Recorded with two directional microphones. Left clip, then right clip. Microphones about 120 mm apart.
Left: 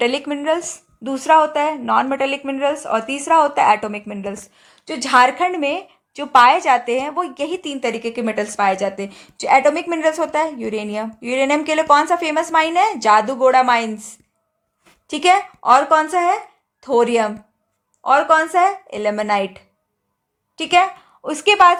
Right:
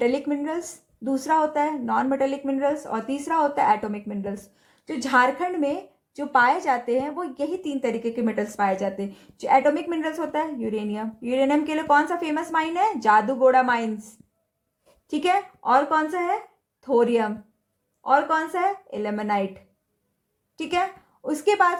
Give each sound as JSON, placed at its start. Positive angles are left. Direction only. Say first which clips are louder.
{"t": 0.0, "sound": "speech", "louder": "left 5 dB", "side_deg": 15}
{"t": 15.0, "sound": "speech", "louder": "left 8 dB", "side_deg": 20}